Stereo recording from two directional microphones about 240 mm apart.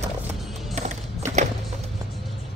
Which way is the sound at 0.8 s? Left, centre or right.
Right.